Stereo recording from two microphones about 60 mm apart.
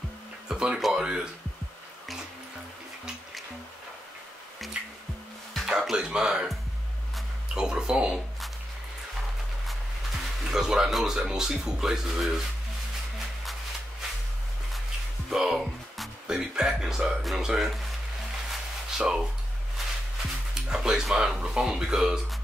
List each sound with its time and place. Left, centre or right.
0.5 s a sound: centre
0.7 s a sound: centre
1.0 s speech: centre
4.7 s music: centre
5.7 s speech: centre
7.5 s speech: centre
10.5 s speech: centre
15.2 s music: centre
17.2 s speech: centre
18.5 s a sound: centre
20.5 s speech: centre